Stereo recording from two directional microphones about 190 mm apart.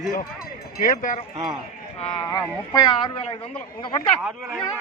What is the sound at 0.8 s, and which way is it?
Speech, 40° left (ahead or behind).